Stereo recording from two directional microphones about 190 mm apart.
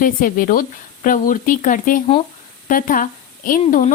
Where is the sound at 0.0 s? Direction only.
50° left (ahead or behind).